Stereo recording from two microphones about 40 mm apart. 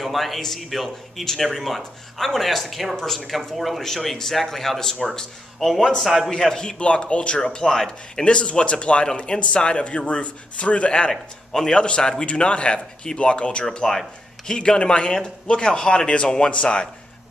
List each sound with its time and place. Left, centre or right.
0.0 s a man's voice: centre
6.5 s speech: left
11.1 s a man's voice: centre
11.8 s speech: left
13.7 s a man's voice: centre; by 16.8 s left